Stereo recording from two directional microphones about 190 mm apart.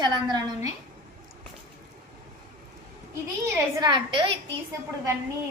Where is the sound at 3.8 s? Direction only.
25° right (ahead or behind).